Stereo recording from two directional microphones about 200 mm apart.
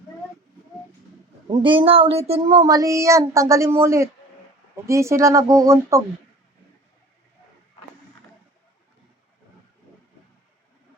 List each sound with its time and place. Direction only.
1.5 s speech: 25° right (ahead or behind)
2.6 s speech: 20° right (ahead or behind)